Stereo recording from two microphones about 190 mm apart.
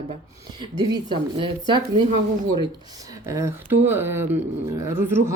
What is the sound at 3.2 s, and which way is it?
Speech, 15° right (ahead or behind).